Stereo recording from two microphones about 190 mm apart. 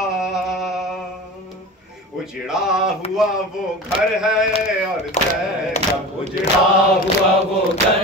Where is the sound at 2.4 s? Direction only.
5° right (ahead or behind).